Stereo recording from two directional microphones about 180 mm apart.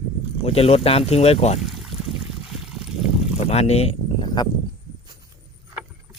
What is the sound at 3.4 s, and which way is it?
Speech, 35° left (ahead or behind).